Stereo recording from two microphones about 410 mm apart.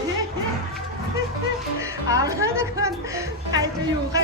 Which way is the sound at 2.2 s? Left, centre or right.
Centre.